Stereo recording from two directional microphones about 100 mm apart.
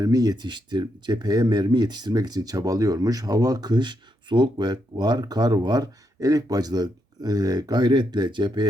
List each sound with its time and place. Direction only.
0.0 s speech: 40° right (ahead or behind)